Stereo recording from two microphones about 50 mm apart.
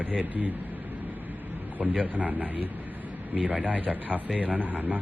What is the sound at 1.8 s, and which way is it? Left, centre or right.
Speech, right.